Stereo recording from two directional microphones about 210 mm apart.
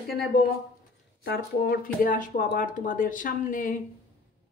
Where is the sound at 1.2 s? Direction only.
45° left (ahead or behind).